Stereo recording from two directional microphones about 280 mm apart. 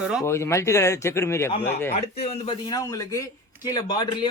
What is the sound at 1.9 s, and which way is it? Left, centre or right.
A man's voice, left.